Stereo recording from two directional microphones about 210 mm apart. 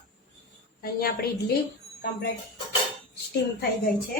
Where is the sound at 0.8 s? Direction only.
45° left (ahead or behind).